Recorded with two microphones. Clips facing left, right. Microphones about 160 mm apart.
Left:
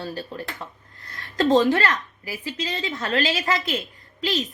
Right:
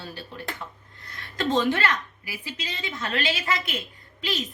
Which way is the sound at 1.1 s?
40° left (ahead or behind).